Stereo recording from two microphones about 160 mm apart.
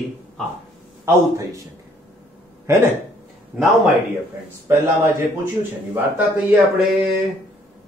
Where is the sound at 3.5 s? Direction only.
5° right (ahead or behind).